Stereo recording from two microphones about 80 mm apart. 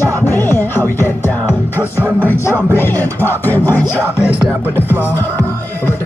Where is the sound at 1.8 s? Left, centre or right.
Right.